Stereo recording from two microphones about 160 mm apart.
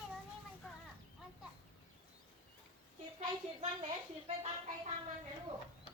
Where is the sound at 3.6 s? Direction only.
40° right (ahead or behind).